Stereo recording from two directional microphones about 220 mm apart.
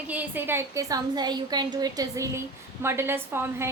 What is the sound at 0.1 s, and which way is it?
A woman's voice, 10° right (ahead or behind).